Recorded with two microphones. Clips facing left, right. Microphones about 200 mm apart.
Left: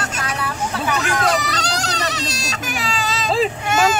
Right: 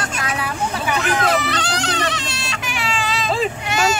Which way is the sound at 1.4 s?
40° left (ahead or behind).